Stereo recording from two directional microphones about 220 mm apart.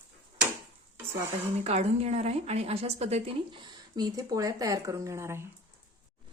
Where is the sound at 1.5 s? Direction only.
30° right (ahead or behind); by 5.5 s 10° right (ahead or behind).